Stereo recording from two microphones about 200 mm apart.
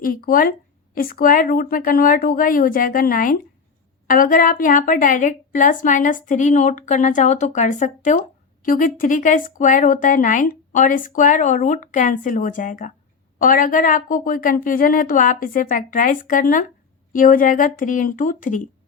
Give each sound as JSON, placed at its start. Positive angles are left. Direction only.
{"t": 0.0, "sound": "a woman's voice", "side_deg": 45}